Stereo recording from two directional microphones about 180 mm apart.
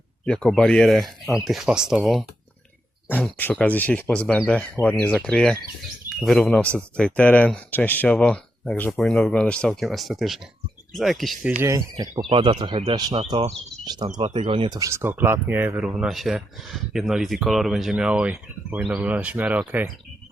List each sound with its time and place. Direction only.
0.3 s speech: 5° left (ahead or behind)
3.1 s speech: 10° left (ahead or behind)
11.6 s speech: 15° right (ahead or behind)
12.3 s speech: 25° right (ahead or behind)
14.8 s speech: 15° right (ahead or behind)